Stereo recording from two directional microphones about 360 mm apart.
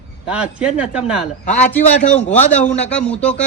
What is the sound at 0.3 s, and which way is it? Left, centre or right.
A man's voice, centre.